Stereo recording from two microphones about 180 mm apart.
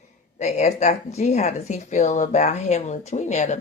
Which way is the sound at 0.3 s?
40° left (ahead or behind).